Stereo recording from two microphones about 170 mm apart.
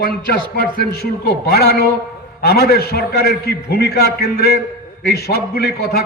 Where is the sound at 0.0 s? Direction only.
60° left (ahead or behind).